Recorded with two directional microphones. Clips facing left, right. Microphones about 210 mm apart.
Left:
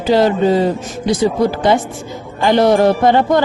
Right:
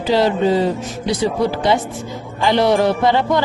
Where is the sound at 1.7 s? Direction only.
50° left (ahead or behind).